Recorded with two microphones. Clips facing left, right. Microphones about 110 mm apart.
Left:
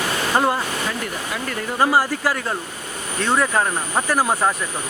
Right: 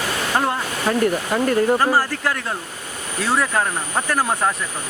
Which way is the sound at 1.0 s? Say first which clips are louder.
Right 8 dB; 45° right (ahead or behind).